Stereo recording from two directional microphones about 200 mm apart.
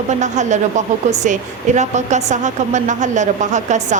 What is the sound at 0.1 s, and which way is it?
Speech, 35° right (ahead or behind).